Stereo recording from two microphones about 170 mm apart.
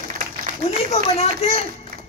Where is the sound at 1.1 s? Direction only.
35° left (ahead or behind).